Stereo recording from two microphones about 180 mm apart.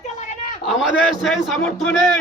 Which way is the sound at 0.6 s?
Centre (ahead or behind).